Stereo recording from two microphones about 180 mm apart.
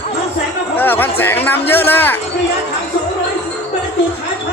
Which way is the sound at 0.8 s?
10° left (ahead or behind).